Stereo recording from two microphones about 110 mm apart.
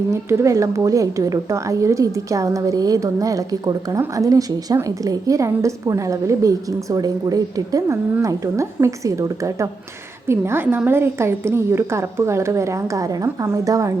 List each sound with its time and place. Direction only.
0.1 s a woman's voice: 25° right (ahead or behind)